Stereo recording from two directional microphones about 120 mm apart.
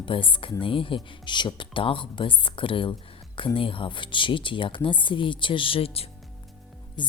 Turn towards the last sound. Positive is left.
turn(degrees=40)  # may be behind; listen again after turning